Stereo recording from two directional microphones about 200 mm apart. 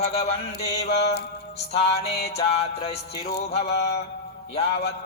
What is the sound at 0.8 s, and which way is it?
Mantra, 30° left (ahead or behind).